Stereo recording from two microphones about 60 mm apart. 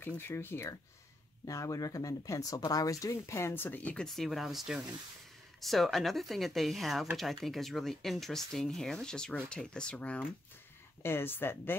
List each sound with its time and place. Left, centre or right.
0.0 s speech: left
1.4 s speech: left
3.3 s speech: left
3.5 s speech: left
3.8 s speech: centre
4.1 s speech: centre; by 10.2 s left
11.0 s speech: left